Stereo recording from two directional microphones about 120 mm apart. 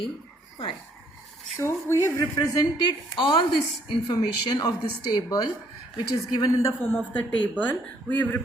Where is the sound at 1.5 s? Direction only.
25° left (ahead or behind).